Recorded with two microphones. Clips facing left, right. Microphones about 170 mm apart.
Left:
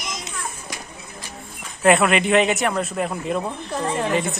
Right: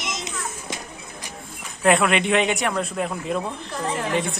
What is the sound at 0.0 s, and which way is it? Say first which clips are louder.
Children playing: right 1 dB; 25° right (ahead or behind).